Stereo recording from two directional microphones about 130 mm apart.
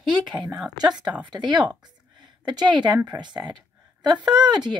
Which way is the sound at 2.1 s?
35° right (ahead or behind).